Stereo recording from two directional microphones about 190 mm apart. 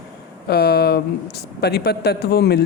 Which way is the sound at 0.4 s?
55° left (ahead or behind).